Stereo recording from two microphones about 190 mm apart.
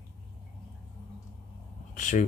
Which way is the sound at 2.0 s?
40° left (ahead or behind).